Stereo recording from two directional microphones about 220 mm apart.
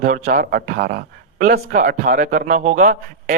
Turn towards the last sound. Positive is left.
turn(degrees=-35)  # may be behind; listen again after turning